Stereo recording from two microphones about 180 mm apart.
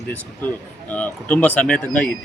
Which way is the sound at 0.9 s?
10° left (ahead or behind).